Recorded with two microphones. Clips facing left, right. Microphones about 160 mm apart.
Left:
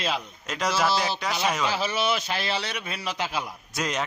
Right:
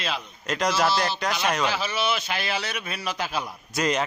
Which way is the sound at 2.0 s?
35° left (ahead or behind).